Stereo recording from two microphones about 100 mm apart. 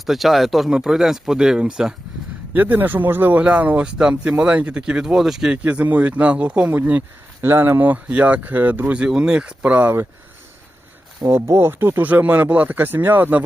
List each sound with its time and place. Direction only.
0.0 s speech: centre (ahead or behind)
2.5 s speech: 20° right (ahead or behind)
11.3 s speech: 25° right (ahead or behind)